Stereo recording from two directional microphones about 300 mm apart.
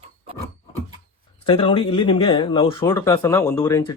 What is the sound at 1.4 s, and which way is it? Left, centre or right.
A man's voice, centre.